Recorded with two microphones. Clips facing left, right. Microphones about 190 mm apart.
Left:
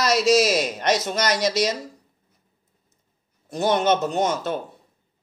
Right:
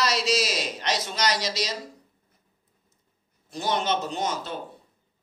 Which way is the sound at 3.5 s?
50° left (ahead or behind).